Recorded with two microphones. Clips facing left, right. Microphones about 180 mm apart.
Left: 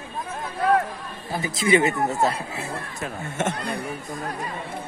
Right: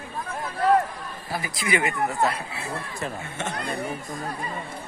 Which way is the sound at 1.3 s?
25° left (ahead or behind).